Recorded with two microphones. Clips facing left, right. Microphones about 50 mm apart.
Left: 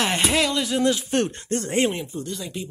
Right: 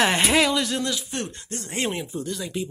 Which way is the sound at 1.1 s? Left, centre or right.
Left.